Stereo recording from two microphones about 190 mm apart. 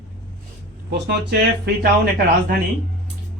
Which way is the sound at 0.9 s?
60° right (ahead or behind).